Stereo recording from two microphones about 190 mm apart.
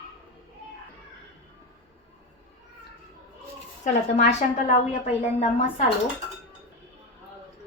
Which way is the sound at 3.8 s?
40° left (ahead or behind).